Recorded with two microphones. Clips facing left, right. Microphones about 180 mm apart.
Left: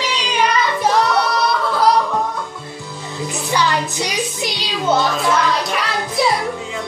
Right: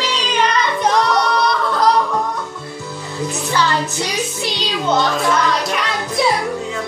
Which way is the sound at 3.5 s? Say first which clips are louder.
Even; 15° left (ahead or behind).